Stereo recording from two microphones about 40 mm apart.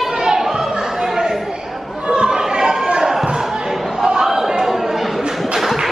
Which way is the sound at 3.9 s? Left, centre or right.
Centre.